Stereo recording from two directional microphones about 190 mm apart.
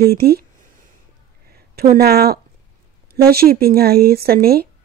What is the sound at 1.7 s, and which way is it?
A woman's voice, 55° right (ahead or behind).